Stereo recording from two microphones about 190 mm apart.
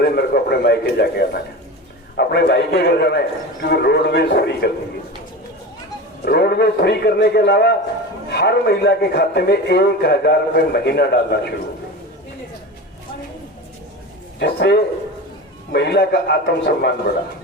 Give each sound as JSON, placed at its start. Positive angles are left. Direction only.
{"t": 0.2, "sound": "a man's voice", "side_deg": 55}
{"t": 6.2, "sound": "a man's voice", "side_deg": 55}
{"t": 14.3, "sound": "a man's voice", "side_deg": 60}